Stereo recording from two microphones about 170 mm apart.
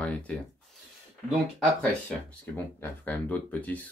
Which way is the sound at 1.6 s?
5° left (ahead or behind).